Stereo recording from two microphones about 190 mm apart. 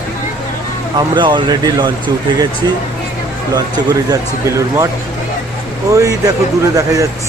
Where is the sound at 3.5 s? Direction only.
20° right (ahead or behind).